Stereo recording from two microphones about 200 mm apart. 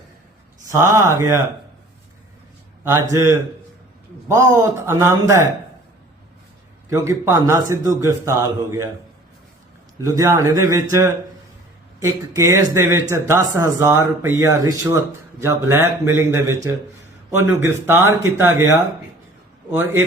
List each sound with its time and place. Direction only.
0.7 s speech: 15° right (ahead or behind)
2.9 s speech: 15° right (ahead or behind)
6.9 s speech: 15° right (ahead or behind)
10.0 s speech: 15° right (ahead or behind)
11.9 s speech: 15° right (ahead or behind)